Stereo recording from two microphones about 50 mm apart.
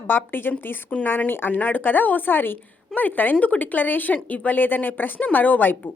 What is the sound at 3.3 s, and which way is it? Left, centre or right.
A woman's voice, left.